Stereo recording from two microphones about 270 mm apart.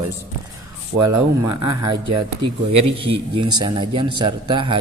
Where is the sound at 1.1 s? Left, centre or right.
Right.